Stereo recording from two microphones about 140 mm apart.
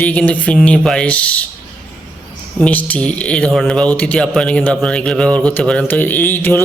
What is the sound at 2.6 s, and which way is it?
Speech, 10° left (ahead or behind).